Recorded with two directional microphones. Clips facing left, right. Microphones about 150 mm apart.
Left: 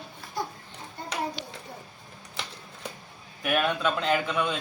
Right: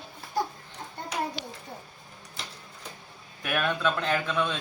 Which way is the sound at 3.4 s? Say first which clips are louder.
Left 2 dB; 15° left (ahead or behind).